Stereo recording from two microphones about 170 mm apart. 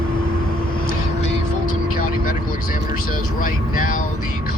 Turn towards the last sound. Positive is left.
turn(degrees=55)  # may be behind; listen again after turning